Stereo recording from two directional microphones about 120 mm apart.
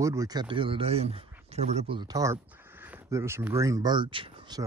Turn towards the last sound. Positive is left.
turn(degrees=-40)  # may be behind; listen again after turning